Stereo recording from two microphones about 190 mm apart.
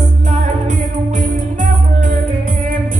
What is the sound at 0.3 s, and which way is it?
Music, 40° right (ahead or behind).